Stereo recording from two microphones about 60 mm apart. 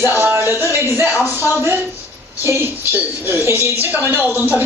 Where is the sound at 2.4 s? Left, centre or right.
Right.